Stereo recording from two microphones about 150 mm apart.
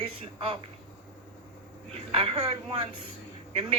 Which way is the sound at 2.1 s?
40° right (ahead or behind).